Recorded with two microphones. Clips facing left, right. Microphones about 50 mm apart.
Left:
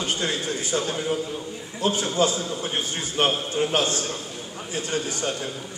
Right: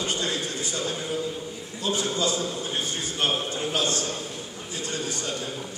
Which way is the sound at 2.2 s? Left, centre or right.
Left.